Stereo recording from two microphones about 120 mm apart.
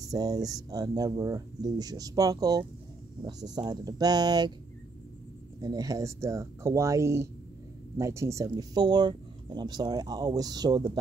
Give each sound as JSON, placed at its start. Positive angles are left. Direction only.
{"t": 0.0, "sound": "speech", "side_deg": -30}
{"t": 5.6, "sound": "speech", "side_deg": -30}